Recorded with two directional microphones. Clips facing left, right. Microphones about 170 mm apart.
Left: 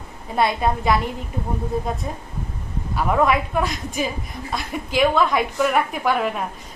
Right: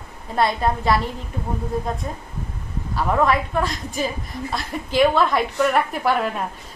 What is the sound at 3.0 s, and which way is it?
A woman's voice, 5° left (ahead or behind).